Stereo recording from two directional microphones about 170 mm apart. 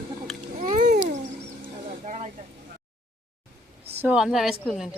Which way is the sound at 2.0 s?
45° right (ahead or behind).